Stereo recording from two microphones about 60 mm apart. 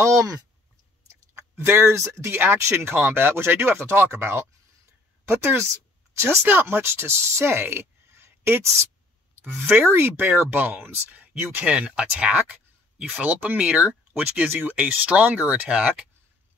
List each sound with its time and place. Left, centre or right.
0.0 s speech: right
1.3 s speech: right
2.3 s speech: right
9.7 s speech: right
10.5 s speech: right